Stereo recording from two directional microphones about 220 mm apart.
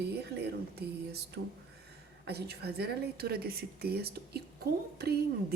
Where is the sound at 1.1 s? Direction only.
50° right (ahead or behind).